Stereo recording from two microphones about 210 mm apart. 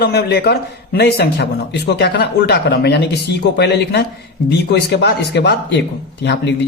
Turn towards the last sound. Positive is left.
turn(degrees=55)  # may be behind; listen again after turning